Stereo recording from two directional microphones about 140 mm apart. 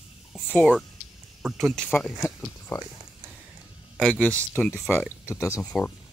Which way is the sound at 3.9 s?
5° left (ahead or behind).